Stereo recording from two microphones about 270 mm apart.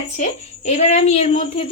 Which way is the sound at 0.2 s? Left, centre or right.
Left.